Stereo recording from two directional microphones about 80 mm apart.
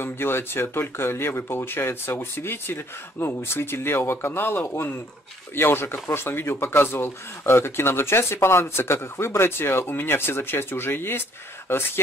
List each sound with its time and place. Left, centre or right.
0.0 s speech: left